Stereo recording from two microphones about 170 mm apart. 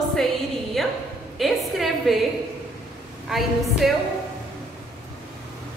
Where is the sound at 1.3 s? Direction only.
Centre (ahead or behind).